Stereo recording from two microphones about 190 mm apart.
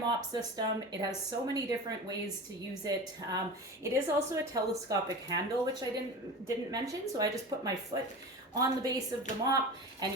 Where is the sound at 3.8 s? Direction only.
15° right (ahead or behind).